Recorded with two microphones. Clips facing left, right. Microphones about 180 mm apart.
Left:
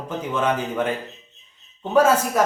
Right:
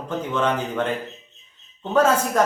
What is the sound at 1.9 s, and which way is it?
Speech, 10° left (ahead or behind).